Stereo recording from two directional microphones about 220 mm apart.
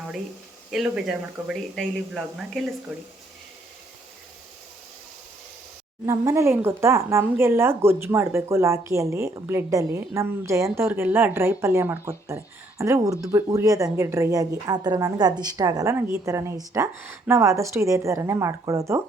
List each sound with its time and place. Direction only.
0.7 s speech: centre (ahead or behind)
6.1 s a woman's voice: 15° right (ahead or behind)